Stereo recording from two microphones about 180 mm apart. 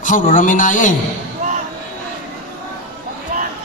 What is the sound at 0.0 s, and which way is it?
Speech, 45° left (ahead or behind).